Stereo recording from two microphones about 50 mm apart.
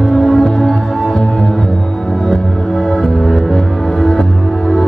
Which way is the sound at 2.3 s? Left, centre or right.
Centre.